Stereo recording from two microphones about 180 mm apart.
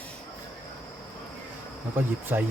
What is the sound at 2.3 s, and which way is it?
Speech, 10° right (ahead or behind).